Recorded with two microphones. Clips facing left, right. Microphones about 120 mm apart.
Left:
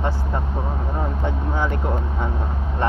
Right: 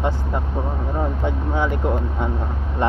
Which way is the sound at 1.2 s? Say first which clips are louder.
Right 2 dB; 15° right (ahead or behind).